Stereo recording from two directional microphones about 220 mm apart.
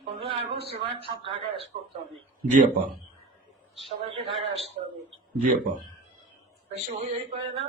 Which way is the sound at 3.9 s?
25° right (ahead or behind).